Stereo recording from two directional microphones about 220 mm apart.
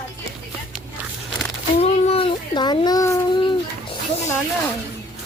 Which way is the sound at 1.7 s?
30° left (ahead or behind).